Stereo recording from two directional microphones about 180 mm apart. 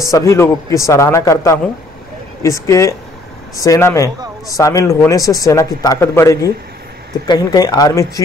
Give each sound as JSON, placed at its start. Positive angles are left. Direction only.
{"t": 0.0, "sound": "speech", "side_deg": 15}